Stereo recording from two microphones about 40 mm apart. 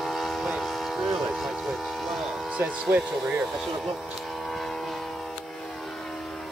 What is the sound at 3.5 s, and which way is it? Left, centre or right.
Vehicle, centre.